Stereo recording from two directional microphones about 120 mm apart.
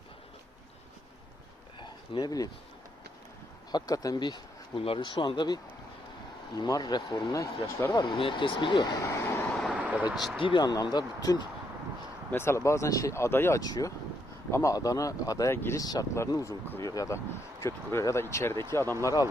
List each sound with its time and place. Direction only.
1.8 s a sound: 35° left (ahead or behind)
3.7 s speech: 35° left (ahead or behind)
6.6 s speech: 30° left (ahead or behind)
8.2 s speech: 45° left (ahead or behind)
9.2 s vehicle: 20° left (ahead or behind)
9.7 s speech: 10° right (ahead or behind)
10.4 s speech: 40° left (ahead or behind)
12.3 s speech: 20° left (ahead or behind)
13.6 s speech: 30° left (ahead or behind)
15.8 s speech: 30° left (ahead or behind)